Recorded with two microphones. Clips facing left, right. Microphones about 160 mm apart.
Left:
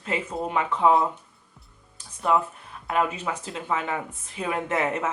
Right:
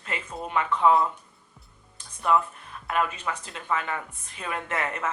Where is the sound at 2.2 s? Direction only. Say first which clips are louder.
Left 1 dB; 25° left (ahead or behind).